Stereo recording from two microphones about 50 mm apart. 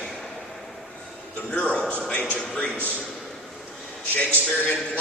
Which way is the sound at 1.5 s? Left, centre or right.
Left.